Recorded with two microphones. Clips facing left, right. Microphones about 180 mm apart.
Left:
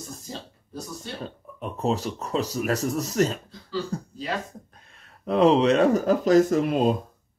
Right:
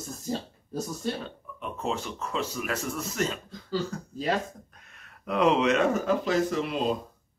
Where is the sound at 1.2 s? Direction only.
40° left (ahead or behind).